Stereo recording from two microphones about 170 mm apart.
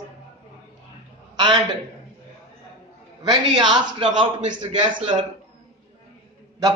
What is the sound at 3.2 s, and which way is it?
Speech, 25° right (ahead or behind).